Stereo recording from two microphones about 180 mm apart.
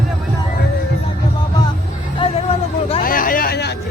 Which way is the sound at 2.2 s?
30° left (ahead or behind).